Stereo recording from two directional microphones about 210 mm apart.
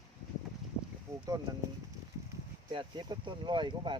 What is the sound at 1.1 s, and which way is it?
Speech, centre (ahead or behind).